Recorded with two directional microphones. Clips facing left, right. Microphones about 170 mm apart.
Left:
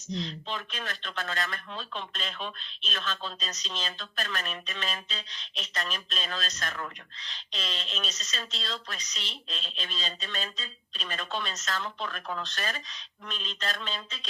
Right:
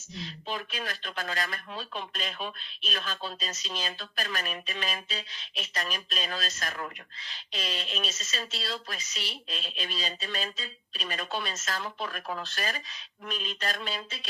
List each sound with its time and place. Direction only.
0.1 s speech: 5° right (ahead or behind)